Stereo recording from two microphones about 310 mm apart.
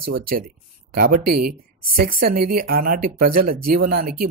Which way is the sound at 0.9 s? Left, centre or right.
Right.